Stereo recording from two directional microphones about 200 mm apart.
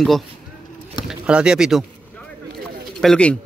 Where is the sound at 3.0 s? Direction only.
5° left (ahead or behind).